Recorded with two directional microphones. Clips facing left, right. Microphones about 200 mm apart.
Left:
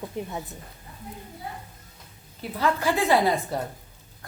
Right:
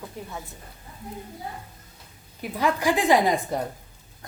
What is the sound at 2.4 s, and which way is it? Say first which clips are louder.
Speech: right 1 dB; 15° right (ahead or behind).